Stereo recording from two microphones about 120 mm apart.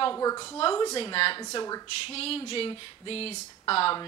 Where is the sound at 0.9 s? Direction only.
50° left (ahead or behind).